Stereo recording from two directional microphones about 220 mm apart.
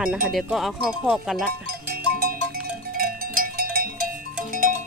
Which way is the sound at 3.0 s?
40° right (ahead or behind).